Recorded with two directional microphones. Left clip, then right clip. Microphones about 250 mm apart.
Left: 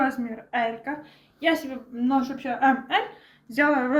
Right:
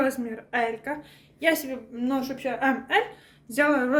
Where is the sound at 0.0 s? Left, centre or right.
Right.